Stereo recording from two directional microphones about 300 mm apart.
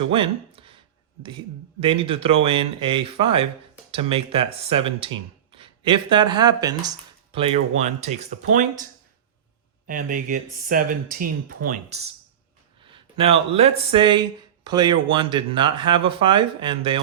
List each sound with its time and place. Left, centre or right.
0.1 s speech: centre
1.8 s speech: centre